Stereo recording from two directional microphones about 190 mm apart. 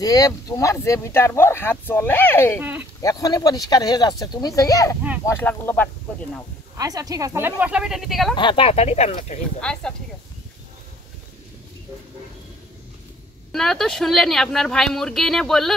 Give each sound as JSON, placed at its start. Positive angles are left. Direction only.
{"t": 0.0, "sound": "speech", "side_deg": 20}
{"t": 2.6, "sound": "speech", "side_deg": -10}
{"t": 3.0, "sound": "speech", "side_deg": 20}
{"t": 6.8, "sound": "speech", "side_deg": -20}
{"t": 8.4, "sound": "speech", "side_deg": 25}
{"t": 9.6, "sound": "speech", "side_deg": 5}
{"t": 13.5, "sound": "speech", "side_deg": 0}